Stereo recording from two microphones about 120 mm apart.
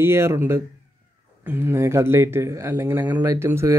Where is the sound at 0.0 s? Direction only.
20° right (ahead or behind).